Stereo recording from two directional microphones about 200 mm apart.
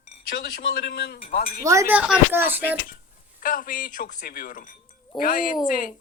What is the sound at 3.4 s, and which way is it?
Speech, 45° left (ahead or behind).